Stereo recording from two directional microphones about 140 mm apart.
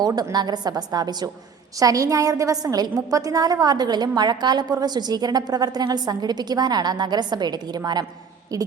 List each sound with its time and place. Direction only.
0.0 s a woman's voice: 30° right (ahead or behind)